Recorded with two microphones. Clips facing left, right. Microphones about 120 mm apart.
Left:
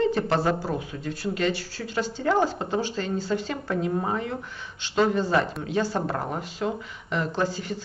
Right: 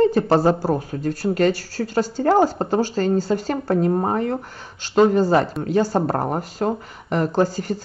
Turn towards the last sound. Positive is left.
turn(degrees=-40)  # may be behind; listen again after turning